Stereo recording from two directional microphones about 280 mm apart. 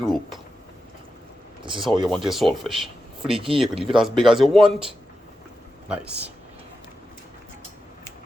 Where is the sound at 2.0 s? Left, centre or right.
Centre.